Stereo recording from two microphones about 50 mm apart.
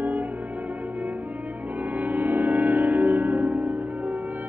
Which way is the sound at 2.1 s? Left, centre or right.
Right.